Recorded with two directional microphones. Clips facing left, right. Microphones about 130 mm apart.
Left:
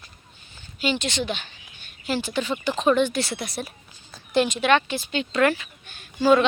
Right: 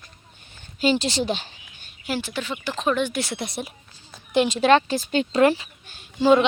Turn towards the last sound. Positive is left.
turn(degrees=-20)  # may be behind; listen again after turning